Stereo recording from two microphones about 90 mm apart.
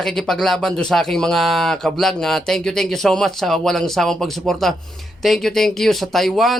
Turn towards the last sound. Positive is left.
turn(degrees=0)  # may be behind; listen again after turning